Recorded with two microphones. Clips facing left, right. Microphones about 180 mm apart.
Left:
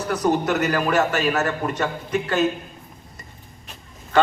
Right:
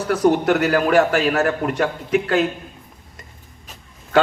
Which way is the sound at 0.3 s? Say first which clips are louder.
Right 4 dB; 60° right (ahead or behind).